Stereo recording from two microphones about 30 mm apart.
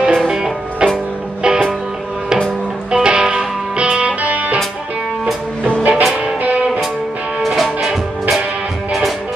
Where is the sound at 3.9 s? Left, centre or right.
Right.